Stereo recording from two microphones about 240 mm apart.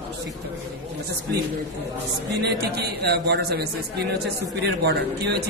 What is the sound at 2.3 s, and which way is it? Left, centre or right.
Speech, right.